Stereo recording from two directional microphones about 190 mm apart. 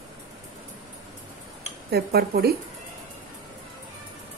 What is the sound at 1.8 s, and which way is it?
Speech, 55° right (ahead or behind).